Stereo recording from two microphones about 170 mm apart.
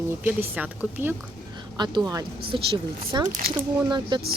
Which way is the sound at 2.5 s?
30° right (ahead or behind).